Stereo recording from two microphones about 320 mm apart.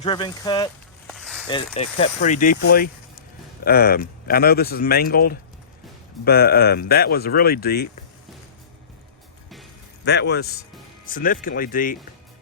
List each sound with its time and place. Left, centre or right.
0.0 s speech: centre
1.1 s a sound: centre
1.5 s speech: centre
10.0 s a man's voice: left